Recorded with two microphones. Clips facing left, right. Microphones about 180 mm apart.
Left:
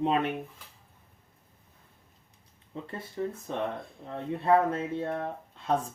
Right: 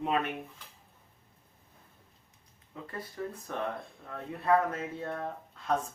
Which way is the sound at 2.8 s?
25° left (ahead or behind).